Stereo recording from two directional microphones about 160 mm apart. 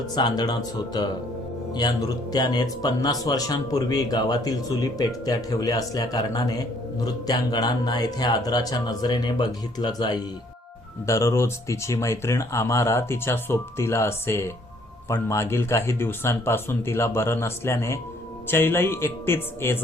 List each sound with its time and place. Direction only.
0.1 s speech: 25° left (ahead or behind)